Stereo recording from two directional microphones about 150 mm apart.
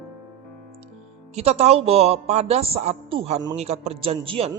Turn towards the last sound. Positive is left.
turn(degrees=-40)  # may be behind; listen again after turning